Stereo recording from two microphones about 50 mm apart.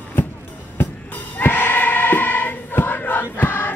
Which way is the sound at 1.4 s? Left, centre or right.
Left.